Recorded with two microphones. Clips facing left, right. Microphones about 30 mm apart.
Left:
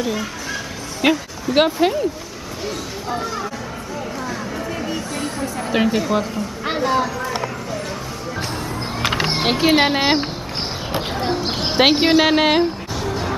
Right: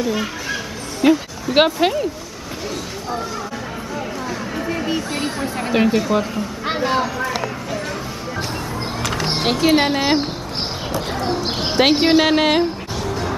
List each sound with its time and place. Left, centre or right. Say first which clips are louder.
0.1 s speech: right 2 dB; centre
1.0 s speech: right 3 dB; left
1.5 s speech: right 1 dB; centre
5.1 s a sound: right 2 dB; right
5.7 s speech: right 2 dB; centre
9.0 s a sound: left 4 dB; left
9.4 s a woman's voice: even; centre
11.3 s a woman's voice: even; centre
12.1 s music: even; centre